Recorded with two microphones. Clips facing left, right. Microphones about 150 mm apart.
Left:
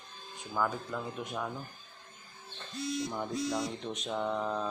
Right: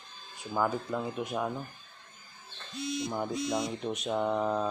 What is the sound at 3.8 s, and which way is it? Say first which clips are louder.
Speech: right 4 dB; 10° right (ahead or behind).